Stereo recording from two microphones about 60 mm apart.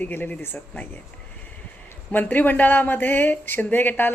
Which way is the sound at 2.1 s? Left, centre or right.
Left.